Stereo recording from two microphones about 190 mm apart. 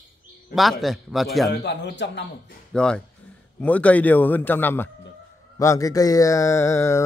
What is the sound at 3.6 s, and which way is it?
Mantra, 5° left (ahead or behind).